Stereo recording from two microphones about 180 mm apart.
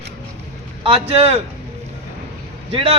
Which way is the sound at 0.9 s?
35° right (ahead or behind).